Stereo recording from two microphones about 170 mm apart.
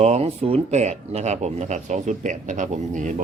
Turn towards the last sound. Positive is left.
turn(degrees=-45)  # may be behind; listen again after turning